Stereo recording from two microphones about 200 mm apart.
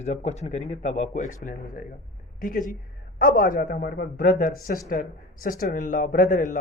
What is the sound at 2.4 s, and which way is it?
Speech, 45° left (ahead or behind).